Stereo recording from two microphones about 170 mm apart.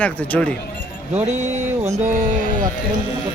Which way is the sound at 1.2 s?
15° right (ahead or behind).